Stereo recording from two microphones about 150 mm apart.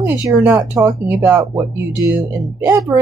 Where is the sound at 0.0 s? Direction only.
10° right (ahead or behind).